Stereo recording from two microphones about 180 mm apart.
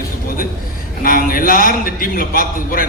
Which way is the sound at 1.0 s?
50° left (ahead or behind).